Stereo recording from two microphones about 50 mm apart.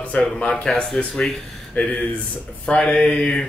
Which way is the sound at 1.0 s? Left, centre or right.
Left.